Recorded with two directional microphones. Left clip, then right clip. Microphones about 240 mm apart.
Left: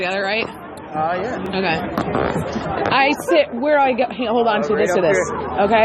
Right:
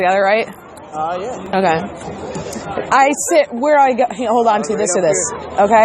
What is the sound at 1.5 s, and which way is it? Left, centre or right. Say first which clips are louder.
A woman's voice: right 7 dB; right.